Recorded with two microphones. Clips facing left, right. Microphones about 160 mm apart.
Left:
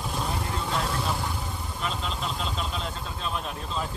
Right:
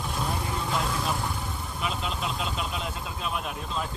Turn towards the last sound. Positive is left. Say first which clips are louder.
# even
turn(degrees=0)  # may be behind; listen again after turning